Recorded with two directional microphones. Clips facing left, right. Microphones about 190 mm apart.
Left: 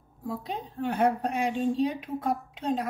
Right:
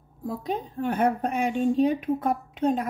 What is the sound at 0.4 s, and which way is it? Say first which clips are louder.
A woman's voice: right 7 dB; 50° right (ahead or behind).